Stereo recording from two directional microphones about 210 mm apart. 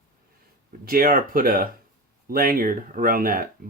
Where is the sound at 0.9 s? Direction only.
45° right (ahead or behind).